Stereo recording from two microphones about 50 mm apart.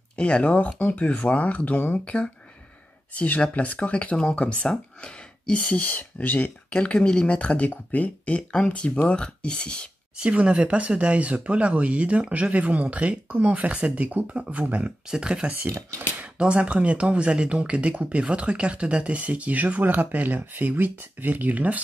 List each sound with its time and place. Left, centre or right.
0.1 s speech: left
2.0 s speech: left
8.4 s speech: left
10.1 s speech: right
15.0 s speech: centre; by 21.8 s right